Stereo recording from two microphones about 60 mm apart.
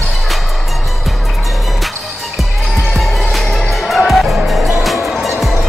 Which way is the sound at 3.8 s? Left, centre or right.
Centre.